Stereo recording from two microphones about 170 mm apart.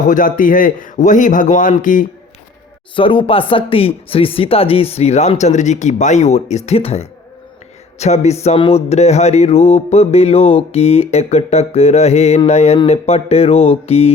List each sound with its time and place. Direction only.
0.0 s a man's voice: 50° left (ahead or behind)
2.9 s music: 30° left (ahead or behind)